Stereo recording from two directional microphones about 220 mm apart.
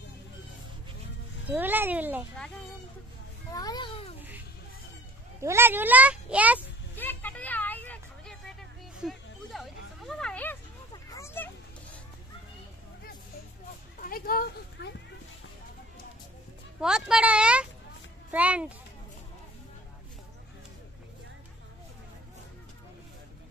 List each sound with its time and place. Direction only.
1.5 s a child's voice: 10° right (ahead or behind)
3.5 s a child's voice: 15° left (ahead or behind)
5.4 s a child's voice: 10° right (ahead or behind)
7.0 s a sound: 10° left (ahead or behind)
13.9 s a sound: 40° left (ahead or behind)
16.8 s a child's voice: 5° right (ahead or behind)